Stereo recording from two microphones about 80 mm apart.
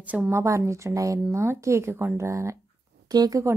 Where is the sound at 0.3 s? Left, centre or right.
Right.